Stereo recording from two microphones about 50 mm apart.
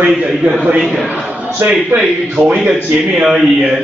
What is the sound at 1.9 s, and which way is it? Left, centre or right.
Speech, centre.